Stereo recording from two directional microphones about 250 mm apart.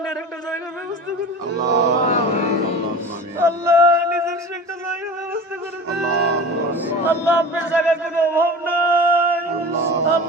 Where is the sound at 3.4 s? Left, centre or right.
Centre.